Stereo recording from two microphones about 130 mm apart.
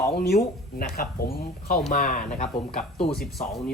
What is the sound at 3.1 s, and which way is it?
Speech, centre (ahead or behind).